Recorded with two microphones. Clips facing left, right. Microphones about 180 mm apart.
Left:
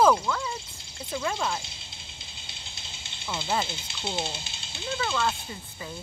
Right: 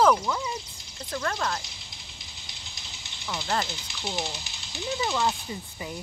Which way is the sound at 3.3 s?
25° left (ahead or behind).